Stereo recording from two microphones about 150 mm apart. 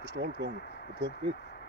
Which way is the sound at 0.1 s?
90° right.